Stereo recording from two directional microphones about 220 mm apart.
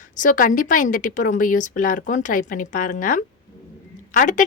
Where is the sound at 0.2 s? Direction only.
40° left (ahead or behind).